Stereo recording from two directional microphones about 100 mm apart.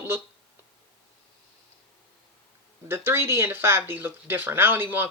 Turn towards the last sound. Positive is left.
turn(degrees=-20)  # may be behind; listen again after turning